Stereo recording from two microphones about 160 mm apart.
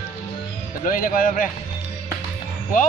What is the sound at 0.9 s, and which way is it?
Speech, 60° left (ahead or behind).